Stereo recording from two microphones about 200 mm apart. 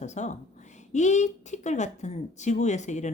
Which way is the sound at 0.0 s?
35° left (ahead or behind).